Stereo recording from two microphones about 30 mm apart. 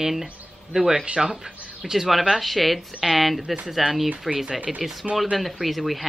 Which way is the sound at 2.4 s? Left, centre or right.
Centre.